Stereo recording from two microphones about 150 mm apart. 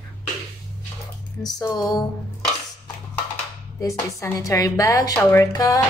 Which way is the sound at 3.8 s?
20° left (ahead or behind).